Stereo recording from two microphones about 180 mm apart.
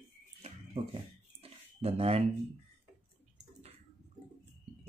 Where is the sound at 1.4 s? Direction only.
35° right (ahead or behind).